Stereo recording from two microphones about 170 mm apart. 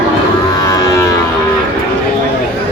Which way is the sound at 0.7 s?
20° left (ahead or behind).